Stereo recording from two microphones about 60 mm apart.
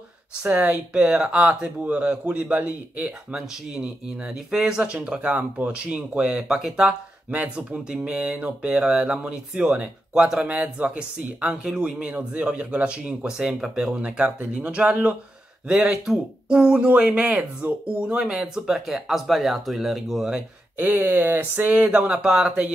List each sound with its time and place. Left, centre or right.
0.4 s a man's voice: right
3.3 s a man's voice: centre
12.1 s a man's voice: right
15.7 s speech: centre
20.7 s speech: right
22.1 s speech: centre